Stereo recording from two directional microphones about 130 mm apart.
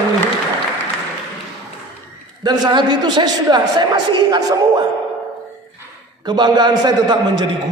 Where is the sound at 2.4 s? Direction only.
30° right (ahead or behind).